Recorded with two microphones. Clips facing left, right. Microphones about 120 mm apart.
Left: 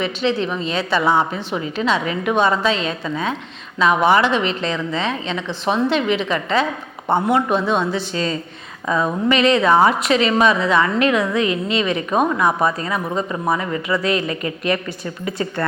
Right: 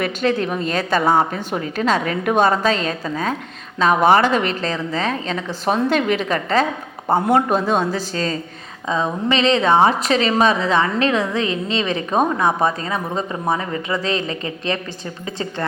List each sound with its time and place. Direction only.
0.0 s a woman's voice: 50° right (ahead or behind)
8.9 s a sound: 25° right (ahead or behind)
9.3 s a woman's voice: 30° right (ahead or behind)